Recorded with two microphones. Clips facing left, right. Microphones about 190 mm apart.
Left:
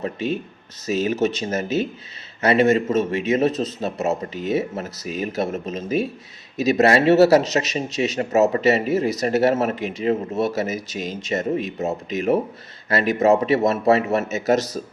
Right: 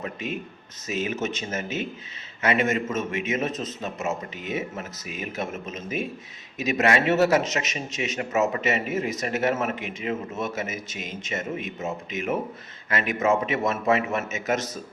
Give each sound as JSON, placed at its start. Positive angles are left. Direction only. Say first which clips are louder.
{"t": 0.0, "sound": "speech", "louder": "left 7 dB", "side_deg": 35}